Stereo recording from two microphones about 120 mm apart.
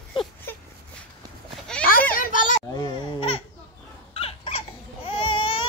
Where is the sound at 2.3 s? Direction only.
90° left.